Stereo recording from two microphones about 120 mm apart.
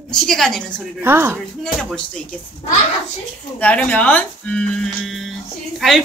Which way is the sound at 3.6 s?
10° left (ahead or behind).